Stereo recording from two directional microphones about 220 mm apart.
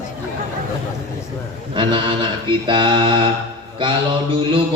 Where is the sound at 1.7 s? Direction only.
20° right (ahead or behind).